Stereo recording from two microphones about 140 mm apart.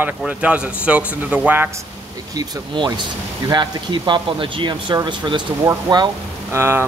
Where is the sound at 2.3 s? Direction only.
30° right (ahead or behind).